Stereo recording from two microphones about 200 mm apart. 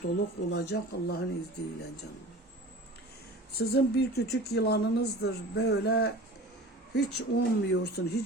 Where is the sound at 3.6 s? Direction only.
55° left (ahead or behind).